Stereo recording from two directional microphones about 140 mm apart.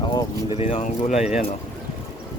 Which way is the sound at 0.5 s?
45° left (ahead or behind).